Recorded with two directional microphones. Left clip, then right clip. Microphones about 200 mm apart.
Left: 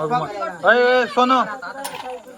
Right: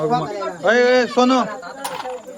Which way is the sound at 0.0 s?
Centre (ahead or behind).